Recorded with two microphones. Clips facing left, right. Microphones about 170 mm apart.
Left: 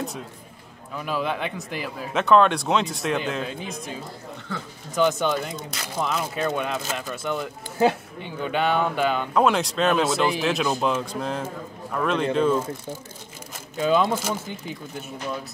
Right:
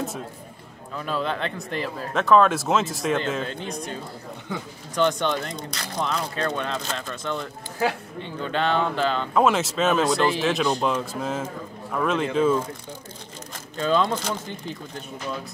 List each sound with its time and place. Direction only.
0.9 s speech: 5° left (ahead or behind)
4.5 s speech: 15° right (ahead or behind)
4.9 s speech: 5° left (ahead or behind)
7.8 s speech: 20° left (ahead or behind)
8.2 s speech: 10° left (ahead or behind)
9.3 s speech: centre (ahead or behind)
13.7 s speech: 10° left (ahead or behind)